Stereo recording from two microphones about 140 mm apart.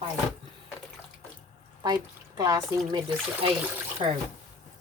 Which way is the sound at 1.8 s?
25° right (ahead or behind).